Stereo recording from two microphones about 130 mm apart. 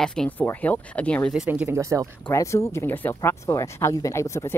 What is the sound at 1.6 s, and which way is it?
Speech, 20° right (ahead or behind).